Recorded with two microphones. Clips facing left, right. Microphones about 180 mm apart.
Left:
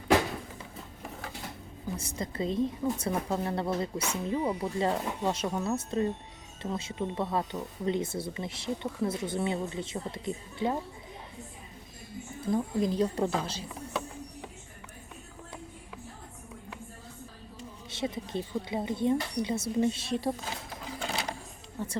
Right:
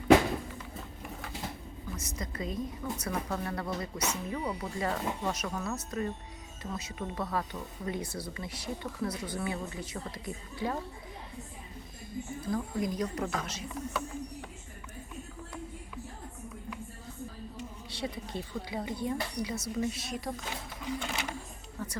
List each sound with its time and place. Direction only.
2.0 s speech: 30° left (ahead or behind)
12.5 s speech: 25° left (ahead or behind)
17.6 s speech: 20° left (ahead or behind)
20.8 s printer: 35° left (ahead or behind)
21.8 s speech: 25° left (ahead or behind)